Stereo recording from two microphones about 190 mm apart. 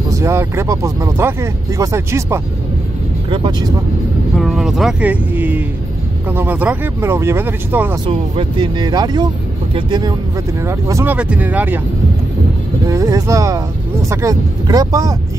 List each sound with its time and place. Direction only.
0.1 s speech: 15° right (ahead or behind)
4.4 s speech: centre (ahead or behind)
8.1 s speech: 25° right (ahead or behind); by 11.8 s 10° right (ahead or behind)
12.8 s speech: 15° right (ahead or behind)